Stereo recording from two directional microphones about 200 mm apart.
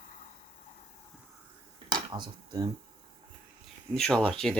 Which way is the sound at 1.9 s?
20° right (ahead or behind).